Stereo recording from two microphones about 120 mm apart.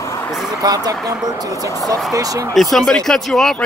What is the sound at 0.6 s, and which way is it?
Speech, 30° right (ahead or behind).